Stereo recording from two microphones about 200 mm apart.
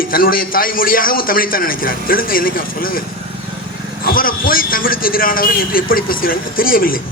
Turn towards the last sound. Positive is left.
turn(degrees=45)  # may be behind; listen again after turning